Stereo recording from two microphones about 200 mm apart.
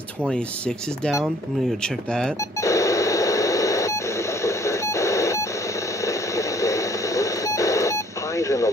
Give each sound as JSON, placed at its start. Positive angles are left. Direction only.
{"t": 0.2, "sound": "speech", "side_deg": 5}
{"t": 2.6, "sound": "radio", "side_deg": 15}